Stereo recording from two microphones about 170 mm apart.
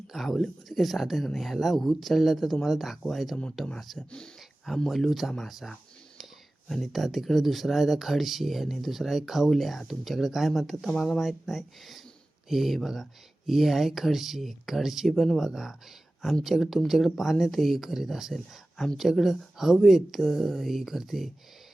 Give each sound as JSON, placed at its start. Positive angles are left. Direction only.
{"t": 0.1, "sound": "speech", "side_deg": 0}